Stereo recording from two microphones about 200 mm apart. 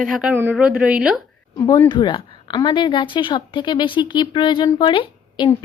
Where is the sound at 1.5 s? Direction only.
15° left (ahead or behind).